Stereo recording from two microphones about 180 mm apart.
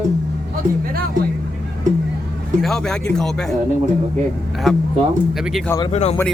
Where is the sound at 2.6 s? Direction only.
5° left (ahead or behind).